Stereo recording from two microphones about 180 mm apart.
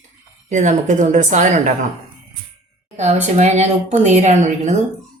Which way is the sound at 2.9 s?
40° right (ahead or behind).